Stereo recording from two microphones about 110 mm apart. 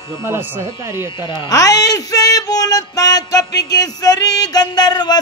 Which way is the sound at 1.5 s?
35° left (ahead or behind).